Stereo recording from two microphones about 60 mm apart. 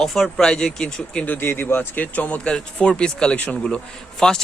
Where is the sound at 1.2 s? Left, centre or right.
Left.